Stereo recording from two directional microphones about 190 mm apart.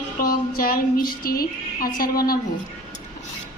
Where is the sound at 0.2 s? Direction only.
50° left (ahead or behind).